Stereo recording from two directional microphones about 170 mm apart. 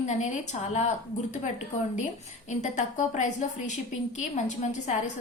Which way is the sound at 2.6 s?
45° left (ahead or behind).